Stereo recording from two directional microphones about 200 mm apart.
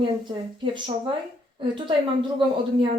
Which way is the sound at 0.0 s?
25° right (ahead or behind).